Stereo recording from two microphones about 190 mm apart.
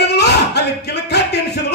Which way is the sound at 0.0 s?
60° left (ahead or behind).